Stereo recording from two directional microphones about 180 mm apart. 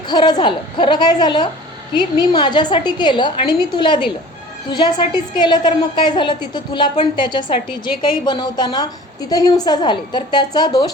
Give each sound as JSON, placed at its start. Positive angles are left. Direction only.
{"t": 0.1, "sound": "a woman's voice", "side_deg": 25}